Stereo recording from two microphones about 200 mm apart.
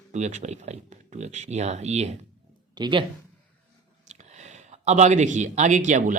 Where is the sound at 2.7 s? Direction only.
25° right (ahead or behind).